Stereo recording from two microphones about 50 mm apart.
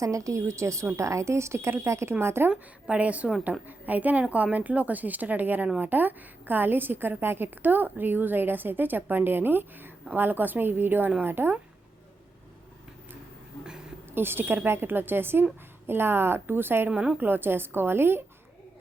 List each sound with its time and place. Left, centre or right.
0.0 s a woman's voice: right
2.9 s a woman's voice: right
14.1 s a woman's voice: right
16.9 s a woman's voice: right
17.2 s a woman's voice: right